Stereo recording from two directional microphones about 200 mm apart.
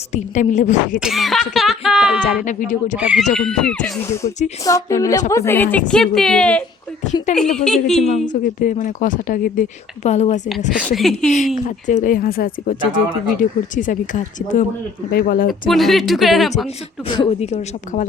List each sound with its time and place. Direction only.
0.1 s a woman's voice: 40° left (ahead or behind)
0.9 s speech: centre (ahead or behind)
2.4 s a woman's voice: 40° left (ahead or behind)
3.0 s speech: 5° right (ahead or behind)
7.0 s a woman's voice: 35° left (ahead or behind)
7.3 s speech: 5° left (ahead or behind)
8.3 s a woman's voice: 40° left (ahead or behind)
10.7 s speech: centre (ahead or behind)
11.3 s a woman's voice: 35° left (ahead or behind)
15.7 s speech: centre (ahead or behind)
16.6 s a woman's voice: 30° left (ahead or behind)